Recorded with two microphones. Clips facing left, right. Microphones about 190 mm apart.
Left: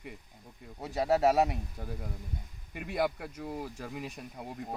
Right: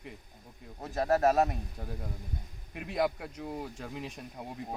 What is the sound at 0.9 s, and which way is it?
Speech, 10° left (ahead or behind).